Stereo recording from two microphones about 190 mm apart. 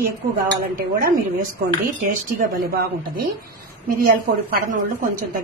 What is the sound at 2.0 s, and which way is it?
A woman's voice, 45° right (ahead or behind).